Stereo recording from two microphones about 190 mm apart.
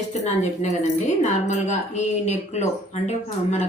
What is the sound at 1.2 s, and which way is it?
A woman's voice, 40° left (ahead or behind).